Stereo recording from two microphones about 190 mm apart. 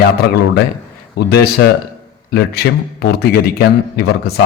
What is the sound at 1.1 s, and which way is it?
A man's voice, 60° left (ahead or behind).